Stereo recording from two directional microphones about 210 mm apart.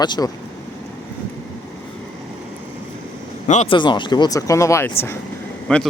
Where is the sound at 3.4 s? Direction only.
35° left (ahead or behind).